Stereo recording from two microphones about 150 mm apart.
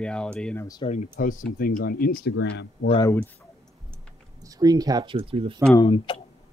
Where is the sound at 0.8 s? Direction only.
55° left (ahead or behind); by 2.3 s 75° left (ahead or behind).